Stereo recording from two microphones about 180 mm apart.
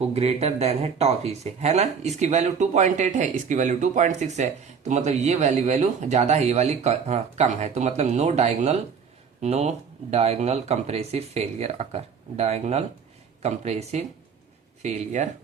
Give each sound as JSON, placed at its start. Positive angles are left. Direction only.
{"t": 0.0, "sound": "speech", "side_deg": -35}